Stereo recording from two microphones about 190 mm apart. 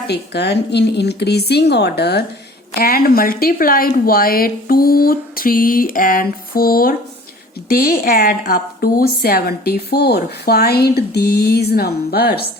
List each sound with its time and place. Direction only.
0.1 s a woman's voice: 60° left (ahead or behind)